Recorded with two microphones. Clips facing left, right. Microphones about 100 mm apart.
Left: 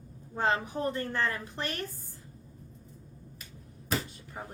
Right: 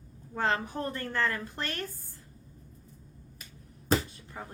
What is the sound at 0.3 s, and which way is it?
A woman's voice, 15° left (ahead or behind).